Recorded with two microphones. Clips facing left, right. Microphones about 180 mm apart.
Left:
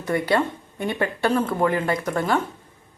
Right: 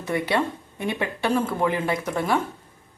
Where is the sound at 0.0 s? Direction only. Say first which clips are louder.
Left 2 dB; 5° right (ahead or behind).